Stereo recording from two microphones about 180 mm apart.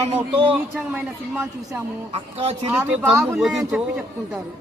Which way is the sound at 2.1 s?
30° right (ahead or behind).